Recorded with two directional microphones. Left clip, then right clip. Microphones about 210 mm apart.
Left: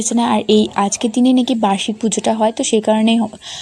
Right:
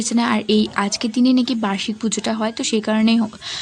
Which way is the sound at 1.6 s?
15° left (ahead or behind).